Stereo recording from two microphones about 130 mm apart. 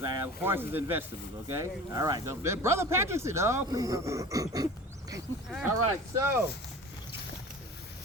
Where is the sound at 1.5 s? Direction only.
25° right (ahead or behind).